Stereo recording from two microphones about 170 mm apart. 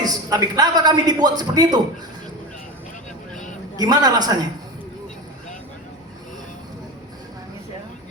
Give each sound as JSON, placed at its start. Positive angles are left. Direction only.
{"t": 0.0, "sound": "a man's voice", "side_deg": -20}
{"t": 3.8, "sound": "a man's voice", "side_deg": -25}